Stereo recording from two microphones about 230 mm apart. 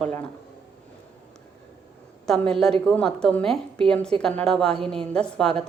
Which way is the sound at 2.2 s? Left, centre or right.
Centre.